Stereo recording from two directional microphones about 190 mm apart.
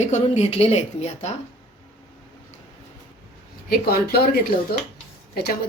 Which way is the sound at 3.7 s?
55° left (ahead or behind).